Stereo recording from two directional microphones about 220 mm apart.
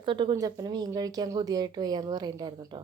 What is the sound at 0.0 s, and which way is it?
Speech, 20° right (ahead or behind).